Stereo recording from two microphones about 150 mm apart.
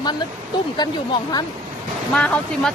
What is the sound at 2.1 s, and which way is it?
Speech, 5° left (ahead or behind).